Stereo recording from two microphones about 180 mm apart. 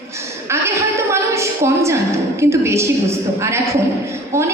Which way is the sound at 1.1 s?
15° right (ahead or behind).